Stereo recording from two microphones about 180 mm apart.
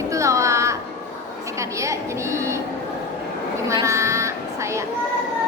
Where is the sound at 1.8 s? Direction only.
15° right (ahead or behind).